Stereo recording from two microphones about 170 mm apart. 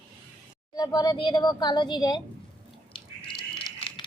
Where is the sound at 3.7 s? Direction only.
30° left (ahead or behind).